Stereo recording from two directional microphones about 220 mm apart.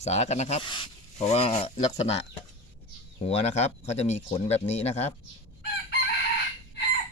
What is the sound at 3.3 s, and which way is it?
Speech, 30° left (ahead or behind).